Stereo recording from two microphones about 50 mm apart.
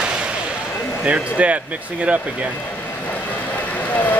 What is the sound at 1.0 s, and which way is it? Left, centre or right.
Speech, right.